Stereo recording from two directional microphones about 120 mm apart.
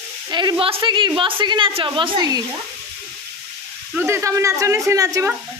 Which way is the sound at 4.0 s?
25° right (ahead or behind).